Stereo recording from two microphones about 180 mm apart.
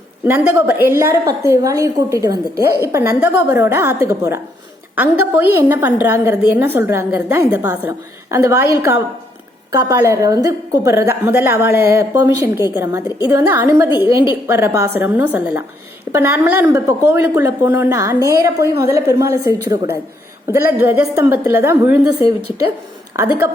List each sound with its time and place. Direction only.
0.3 s a woman's voice: 10° right (ahead or behind)
23.1 s a woman's voice: 20° right (ahead or behind)